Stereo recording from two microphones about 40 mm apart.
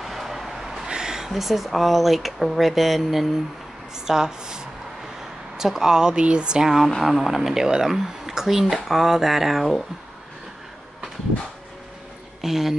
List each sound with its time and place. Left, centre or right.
0.0 s vehicle: centre
0.8 s speech: centre
3.9 s speech: centre
7.0 s speech: centre
12.4 s speech: centre